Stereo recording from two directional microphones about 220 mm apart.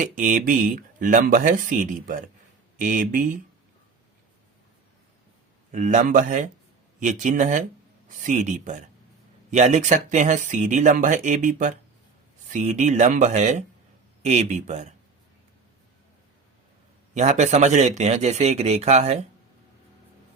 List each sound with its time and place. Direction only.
0.0 s speech: 35° right (ahead or behind)
5.7 s speech: 35° right (ahead or behind)
17.2 s speech: 35° right (ahead or behind)